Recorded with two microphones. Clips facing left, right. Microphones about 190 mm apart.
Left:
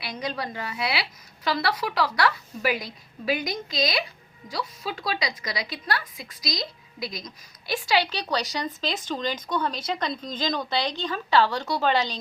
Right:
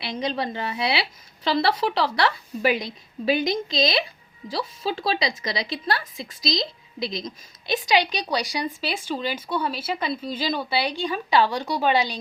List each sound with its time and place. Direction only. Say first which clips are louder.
0.0 s a woman's voice: right 4 dB; 25° right (ahead or behind)